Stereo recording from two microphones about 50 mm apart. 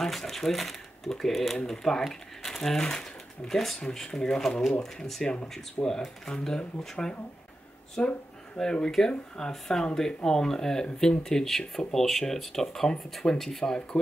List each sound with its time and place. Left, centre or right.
0.0 s speech: centre